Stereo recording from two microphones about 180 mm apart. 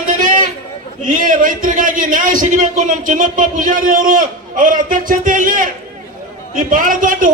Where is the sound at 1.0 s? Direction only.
50° right (ahead or behind).